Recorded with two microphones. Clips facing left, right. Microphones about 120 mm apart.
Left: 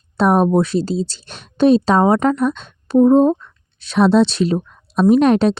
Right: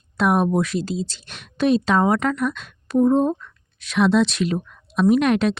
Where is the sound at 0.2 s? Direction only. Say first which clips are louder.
Left 5 dB; 35° left (ahead or behind).